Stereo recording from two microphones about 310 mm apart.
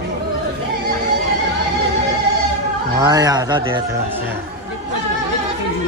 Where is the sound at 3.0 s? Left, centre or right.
Centre.